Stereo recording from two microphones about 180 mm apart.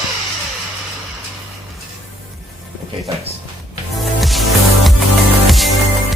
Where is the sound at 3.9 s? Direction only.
Centre (ahead or behind).